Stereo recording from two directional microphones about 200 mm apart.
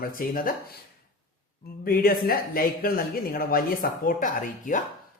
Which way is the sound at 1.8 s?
45° left (ahead or behind).